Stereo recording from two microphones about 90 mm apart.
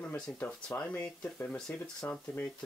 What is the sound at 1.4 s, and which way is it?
Speech, 10° left (ahead or behind).